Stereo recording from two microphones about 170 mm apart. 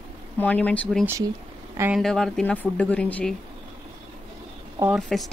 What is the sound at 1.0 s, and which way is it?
Speech, 15° right (ahead or behind).